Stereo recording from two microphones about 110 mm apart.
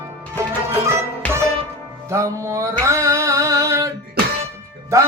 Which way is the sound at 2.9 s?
25° right (ahead or behind).